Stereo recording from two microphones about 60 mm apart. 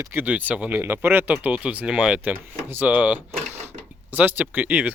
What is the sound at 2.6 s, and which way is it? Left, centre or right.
Speech, right.